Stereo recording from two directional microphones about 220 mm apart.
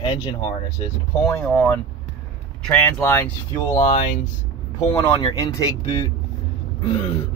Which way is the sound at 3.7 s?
30° left (ahead or behind).